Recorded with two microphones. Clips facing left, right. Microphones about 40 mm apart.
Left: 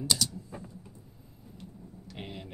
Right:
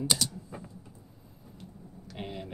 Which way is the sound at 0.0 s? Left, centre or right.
Centre.